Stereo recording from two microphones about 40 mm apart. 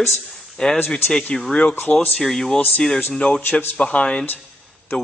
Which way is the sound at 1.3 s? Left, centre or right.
Centre.